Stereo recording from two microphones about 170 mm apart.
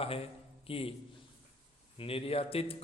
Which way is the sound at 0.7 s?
35° left (ahead or behind).